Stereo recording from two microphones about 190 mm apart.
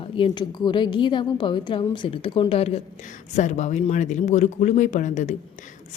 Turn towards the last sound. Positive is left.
turn(degrees=40)  # may be behind; listen again after turning